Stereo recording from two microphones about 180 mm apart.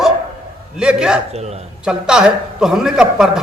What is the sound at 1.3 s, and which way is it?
Speech, 35° right (ahead or behind).